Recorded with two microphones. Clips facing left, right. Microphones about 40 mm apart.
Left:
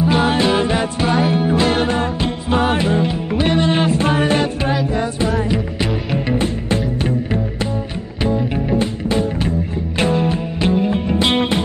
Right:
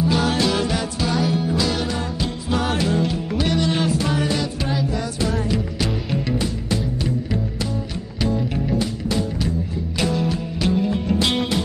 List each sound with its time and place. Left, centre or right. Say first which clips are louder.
0.0 s music: left 4 dB; left
5.5 s music: left 3 dB; left
8.2 s music: left 4 dB; left